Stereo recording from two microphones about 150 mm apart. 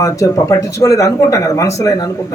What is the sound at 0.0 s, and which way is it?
Speech, 20° left (ahead or behind).